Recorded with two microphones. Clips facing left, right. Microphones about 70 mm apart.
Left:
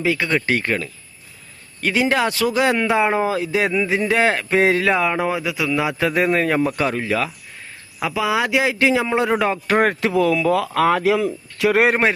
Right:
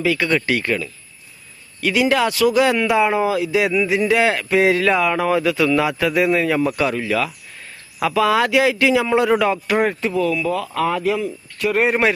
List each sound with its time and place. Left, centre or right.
0.0 s speech: left
1.8 s speech: left
8.0 s speech: centre; by 9.7 s left
9.7 s speech: left
10.0 s speech: left